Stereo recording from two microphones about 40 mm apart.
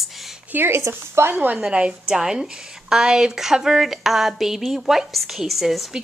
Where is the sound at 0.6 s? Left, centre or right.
Right.